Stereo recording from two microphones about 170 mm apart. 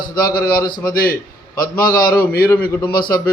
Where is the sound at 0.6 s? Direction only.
20° left (ahead or behind).